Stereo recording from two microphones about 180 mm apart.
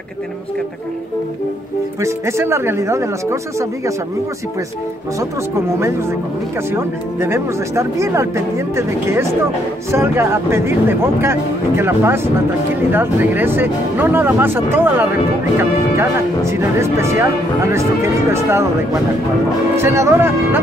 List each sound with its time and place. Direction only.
2.0 s speech: 15° right (ahead or behind)
6.7 s speech: 15° right (ahead or behind)
19.8 s speech: 15° right (ahead or behind)